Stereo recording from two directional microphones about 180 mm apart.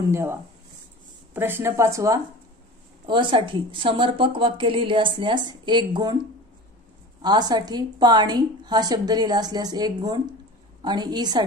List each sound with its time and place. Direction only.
0.1 s speech: 15° right (ahead or behind)
3.1 s speech: 25° right (ahead or behind)
7.2 s speech: 25° right (ahead or behind)